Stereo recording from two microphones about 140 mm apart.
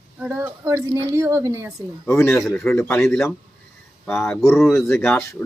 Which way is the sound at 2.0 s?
20° left (ahead or behind).